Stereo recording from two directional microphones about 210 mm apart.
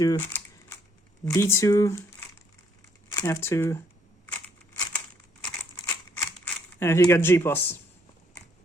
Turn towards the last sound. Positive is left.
turn(degrees=10)  # may be behind; listen again after turning